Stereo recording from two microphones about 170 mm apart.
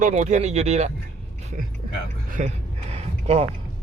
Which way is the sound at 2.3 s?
40° right (ahead or behind).